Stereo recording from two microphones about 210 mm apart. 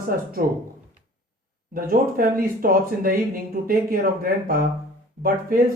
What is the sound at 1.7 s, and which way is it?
Speech, 40° right (ahead or behind).